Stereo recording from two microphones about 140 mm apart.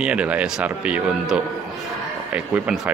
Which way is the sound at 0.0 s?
10° right (ahead or behind).